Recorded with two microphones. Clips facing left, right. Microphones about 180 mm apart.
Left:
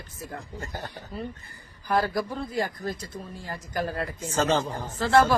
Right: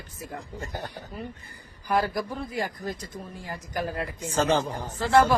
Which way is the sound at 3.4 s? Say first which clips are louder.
Left 1 dB; 15° right (ahead or behind).